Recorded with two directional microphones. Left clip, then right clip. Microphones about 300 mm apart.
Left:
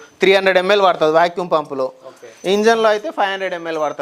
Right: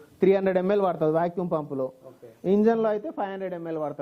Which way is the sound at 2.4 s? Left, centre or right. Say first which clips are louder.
Left 9 dB; centre.